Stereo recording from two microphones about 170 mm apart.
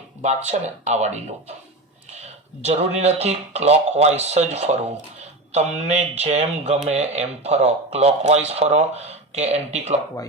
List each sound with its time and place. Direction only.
0.4 s speech: 40° right (ahead or behind)